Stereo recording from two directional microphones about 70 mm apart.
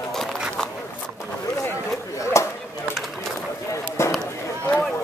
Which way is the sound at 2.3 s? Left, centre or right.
Left.